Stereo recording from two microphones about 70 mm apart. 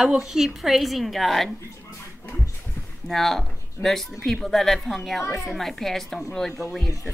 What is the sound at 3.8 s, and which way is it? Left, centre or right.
Speech, left.